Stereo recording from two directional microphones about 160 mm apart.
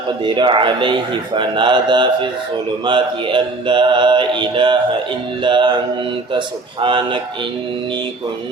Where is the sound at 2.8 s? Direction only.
30° right (ahead or behind).